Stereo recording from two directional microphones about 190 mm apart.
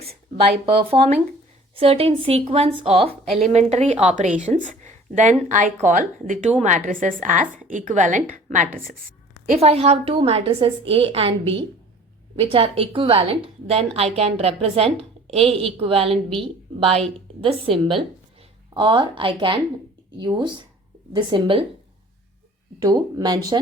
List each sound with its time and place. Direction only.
0.6 s a woman's voice: 30° right (ahead or behind)
4.7 s a sound: 40° right (ahead or behind)
5.5 s a woman's voice: 40° right (ahead or behind)
9.5 s a woman's voice: 30° right (ahead or behind)
17.4 s a woman's voice: 30° right (ahead or behind)
22.8 s a woman's voice: 20° right (ahead or behind)